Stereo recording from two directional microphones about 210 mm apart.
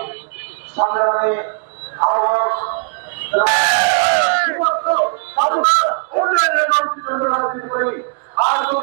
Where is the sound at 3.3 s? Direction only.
15° right (ahead or behind).